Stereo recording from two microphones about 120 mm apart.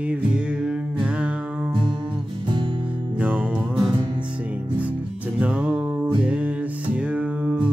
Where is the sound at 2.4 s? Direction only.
40° right (ahead or behind).